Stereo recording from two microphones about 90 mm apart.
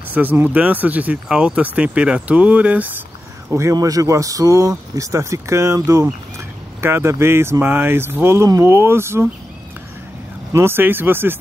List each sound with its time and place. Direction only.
0.1 s speech: 20° right (ahead or behind)
3.7 s speech: 40° right (ahead or behind)
6.8 s speech: 30° right (ahead or behind)
10.5 s speech: 25° right (ahead or behind)